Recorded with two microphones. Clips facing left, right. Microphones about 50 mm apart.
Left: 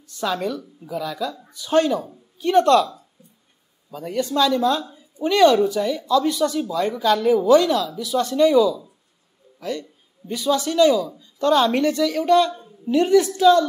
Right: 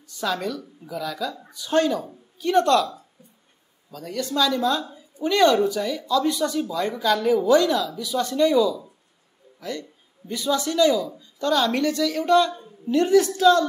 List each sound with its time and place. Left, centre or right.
0.2 s speech: centre
3.9 s speech: centre
6.2 s speech: centre
6.5 s speech: centre
9.7 s a woman's voice: left